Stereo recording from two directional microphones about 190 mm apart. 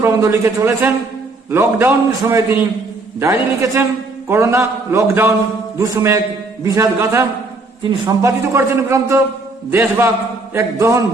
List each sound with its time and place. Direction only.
0.0 s a man's voice: 15° right (ahead or behind)
10.5 s a man's voice: 15° right (ahead or behind)